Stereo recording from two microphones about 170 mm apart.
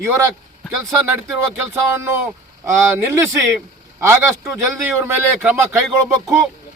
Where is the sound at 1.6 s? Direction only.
15° right (ahead or behind).